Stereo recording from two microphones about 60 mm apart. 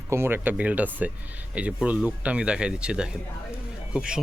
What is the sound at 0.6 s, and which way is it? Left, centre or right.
Speech, right.